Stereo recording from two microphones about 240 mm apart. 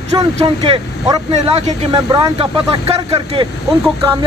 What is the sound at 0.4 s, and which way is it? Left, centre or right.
Speech, right.